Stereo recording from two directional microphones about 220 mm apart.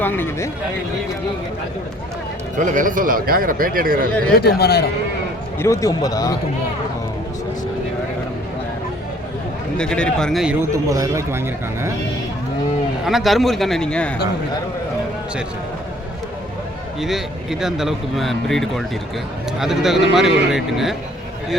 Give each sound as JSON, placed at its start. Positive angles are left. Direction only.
{"t": 0.0, "sound": "speech", "side_deg": 10}
{"t": 2.6, "sound": "speech", "side_deg": -35}
{"t": 4.4, "sound": "a man's voice", "side_deg": 45}
{"t": 5.5, "sound": "speech", "side_deg": 15}
{"t": 9.7, "sound": "speech", "side_deg": 5}
{"t": 10.7, "sound": "speech", "side_deg": -15}
{"t": 13.1, "sound": "speech", "side_deg": 0}
{"t": 17.0, "sound": "speech", "side_deg": 0}